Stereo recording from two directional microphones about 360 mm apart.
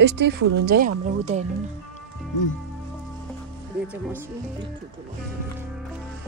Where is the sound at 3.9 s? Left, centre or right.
Centre.